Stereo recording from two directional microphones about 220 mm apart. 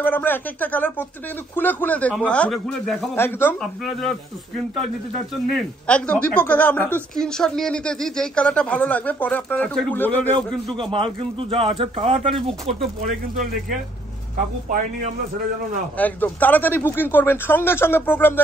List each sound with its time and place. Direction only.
0.0 s a woman's voice: 10° left (ahead or behind)
5.5 s a woman's voice: 5° left (ahead or behind)
10.8 s speech: 25° right (ahead or behind)
16.0 s speech: 5° left (ahead or behind)